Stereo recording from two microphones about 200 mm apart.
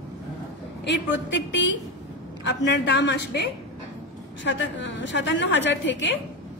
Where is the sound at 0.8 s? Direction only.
60° left (ahead or behind).